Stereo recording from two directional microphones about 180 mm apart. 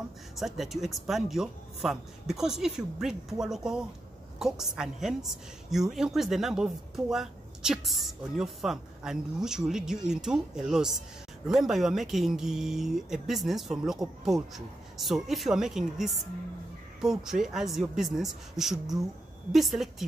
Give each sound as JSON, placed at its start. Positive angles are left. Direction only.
{"t": 0.4, "sound": "speech", "side_deg": 0}